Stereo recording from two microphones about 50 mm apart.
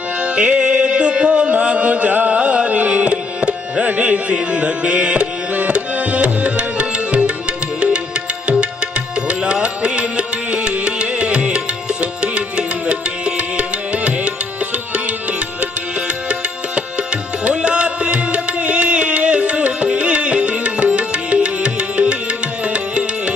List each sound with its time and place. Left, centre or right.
0.2 s music: right